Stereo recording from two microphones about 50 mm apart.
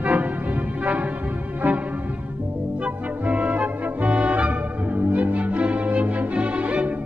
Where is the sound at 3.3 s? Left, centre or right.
Right.